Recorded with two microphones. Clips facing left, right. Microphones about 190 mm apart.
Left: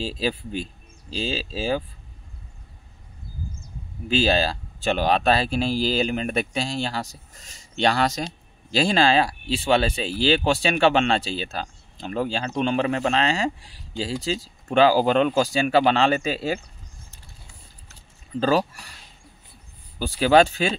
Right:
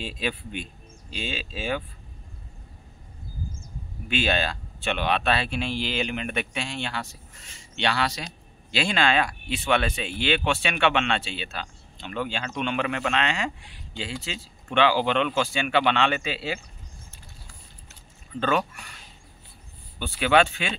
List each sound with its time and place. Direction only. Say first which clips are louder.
0.0 s speech: left 5 dB; 30° left (ahead or behind)
4.1 s speech: left 5 dB; 30° left (ahead or behind)
18.3 s speech: left 4 dB; 35° left (ahead or behind)
20.0 s speech: left 4 dB; 35° left (ahead or behind)